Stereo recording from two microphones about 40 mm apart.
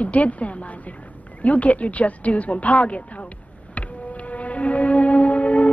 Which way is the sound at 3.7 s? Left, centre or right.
Left.